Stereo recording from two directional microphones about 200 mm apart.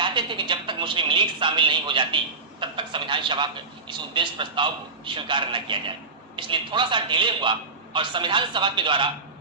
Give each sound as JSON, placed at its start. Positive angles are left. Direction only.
{"t": 0.0, "sound": "a man's voice", "side_deg": -25}